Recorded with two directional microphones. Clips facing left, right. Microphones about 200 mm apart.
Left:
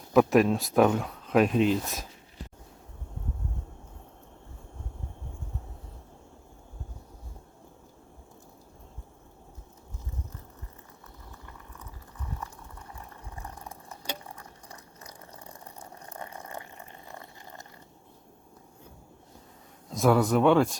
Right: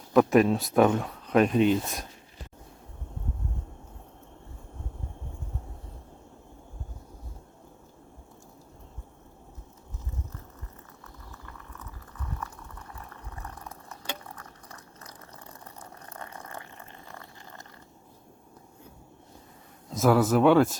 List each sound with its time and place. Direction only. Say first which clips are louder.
0.1 s speech: right 1 dB; centre (ahead or behind)
11.3 s a sound: right 1 dB; 15° left (ahead or behind)
12.9 s boiling: left 1 dB; 20° left (ahead or behind)
15.6 s water: even; 15° left (ahead or behind)
17.1 s a sound: left 1 dB; 20° left (ahead or behind)
19.9 s speech: right 1 dB; centre (ahead or behind)